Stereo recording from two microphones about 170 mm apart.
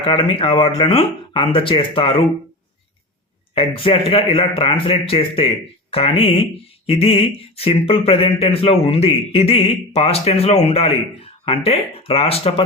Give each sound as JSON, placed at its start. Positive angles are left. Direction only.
{"t": 0.0, "sound": "speech", "side_deg": 30}
{"t": 3.5, "sound": "speech", "side_deg": 30}